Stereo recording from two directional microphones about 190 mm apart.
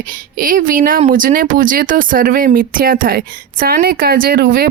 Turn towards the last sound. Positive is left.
turn(degrees=-50)  # may be behind; listen again after turning